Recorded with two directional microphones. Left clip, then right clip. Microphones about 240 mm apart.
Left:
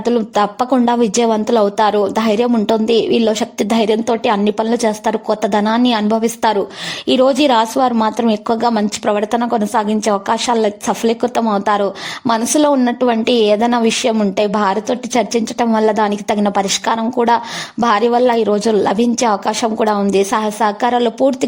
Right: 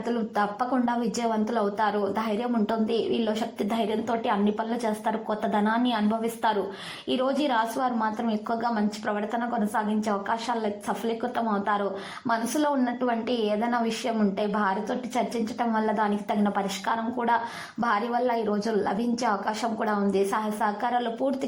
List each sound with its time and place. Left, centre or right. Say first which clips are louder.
0.0 s a woman's voice: left 12 dB; left